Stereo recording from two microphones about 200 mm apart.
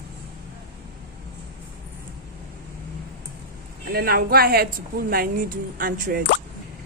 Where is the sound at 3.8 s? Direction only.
50° right (ahead or behind).